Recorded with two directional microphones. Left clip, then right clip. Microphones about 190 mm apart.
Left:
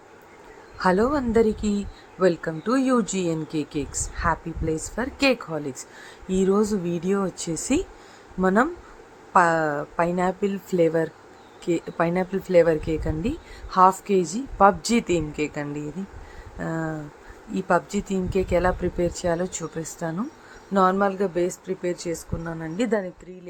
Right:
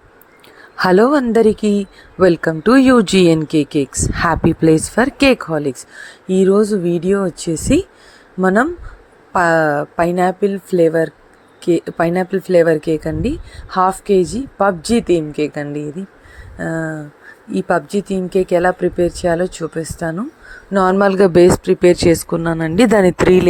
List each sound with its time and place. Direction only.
0.8 s speech: 40° right (ahead or behind)
4.1 s speech: 45° right (ahead or behind); by 20.2 s 25° right (ahead or behind)
20.7 s speech: 35° right (ahead or behind)
21.1 s speech: 50° right (ahead or behind)